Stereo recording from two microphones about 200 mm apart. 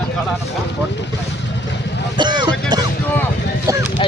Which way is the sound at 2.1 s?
20° right (ahead or behind).